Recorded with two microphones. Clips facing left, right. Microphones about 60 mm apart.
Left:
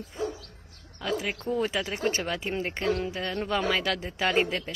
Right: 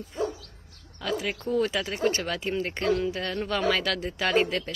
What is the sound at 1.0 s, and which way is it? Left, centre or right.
Speech, centre.